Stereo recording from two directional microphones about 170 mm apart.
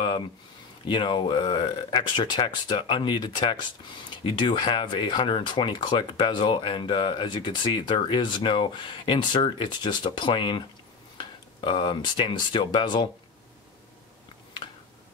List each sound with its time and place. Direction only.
0.8 s speech: 30° left (ahead or behind)